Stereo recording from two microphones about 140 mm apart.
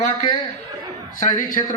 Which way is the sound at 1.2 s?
65° left (ahead or behind).